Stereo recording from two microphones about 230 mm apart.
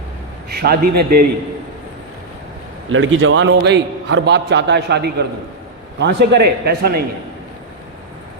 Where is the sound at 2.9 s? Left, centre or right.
Right.